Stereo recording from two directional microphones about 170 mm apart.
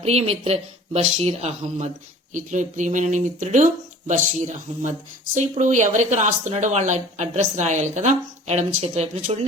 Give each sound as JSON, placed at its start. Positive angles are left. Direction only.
{"t": 0.0, "sound": "speech", "side_deg": -35}